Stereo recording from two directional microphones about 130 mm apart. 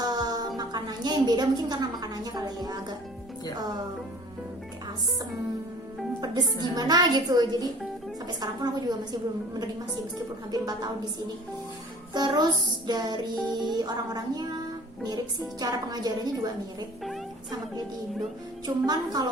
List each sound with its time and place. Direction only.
0.0 s music: 30° right (ahead or behind)
6.2 s a woman's voice: 30° right (ahead or behind)
6.7 s music: 30° right (ahead or behind)
10.5 s a woman's voice: 30° right (ahead or behind)
12.1 s music: 35° right (ahead or behind)
15.6 s music: 30° right (ahead or behind)
18.6 s music: 30° right (ahead or behind)